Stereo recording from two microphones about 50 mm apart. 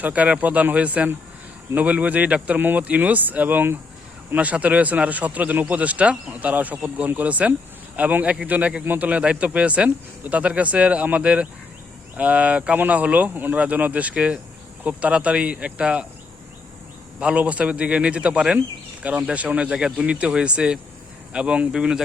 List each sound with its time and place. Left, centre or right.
0.0 s speech: right
2.6 s speech: right
2.8 s speech: right
4.4 s speech: right
17.2 s speech: right
19.0 s speech: right